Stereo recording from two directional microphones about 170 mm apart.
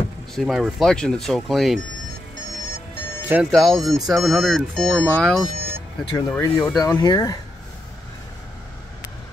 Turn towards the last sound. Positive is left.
turn(degrees=20)  # may be behind; listen again after turning